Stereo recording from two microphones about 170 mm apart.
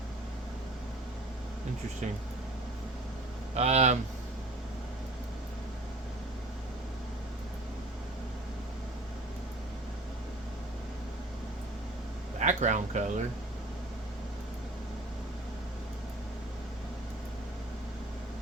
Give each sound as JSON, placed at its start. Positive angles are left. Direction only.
{"t": 3.5, "sound": "speech", "side_deg": -40}
{"t": 12.4, "sound": "speech", "side_deg": -45}